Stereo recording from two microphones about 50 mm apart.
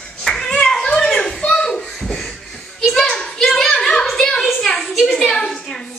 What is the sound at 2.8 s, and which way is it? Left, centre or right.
Children playing, centre.